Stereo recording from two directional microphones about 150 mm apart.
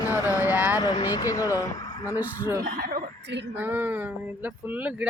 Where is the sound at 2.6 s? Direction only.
80° right.